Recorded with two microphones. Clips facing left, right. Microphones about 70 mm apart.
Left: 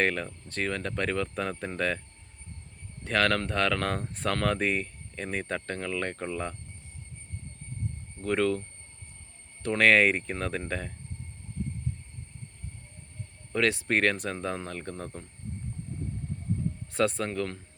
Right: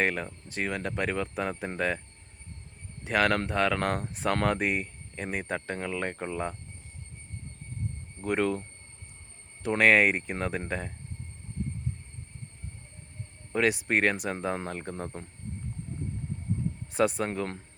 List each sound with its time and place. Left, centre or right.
0.0 s speech: centre
3.0 s speech: centre
8.2 s speech: centre
9.6 s speech: centre
13.5 s speech: centre
16.9 s speech: centre